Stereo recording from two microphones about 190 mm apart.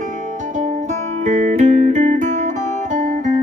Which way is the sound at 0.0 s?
40° right (ahead or behind).